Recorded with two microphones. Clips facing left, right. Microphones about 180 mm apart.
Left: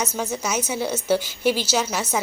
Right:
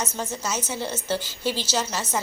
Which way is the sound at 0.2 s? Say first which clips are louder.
Left 4 dB; 10° left (ahead or behind).